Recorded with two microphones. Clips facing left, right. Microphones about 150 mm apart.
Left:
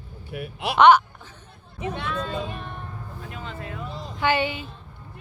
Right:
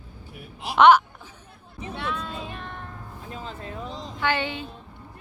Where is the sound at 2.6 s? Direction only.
15° left (ahead or behind).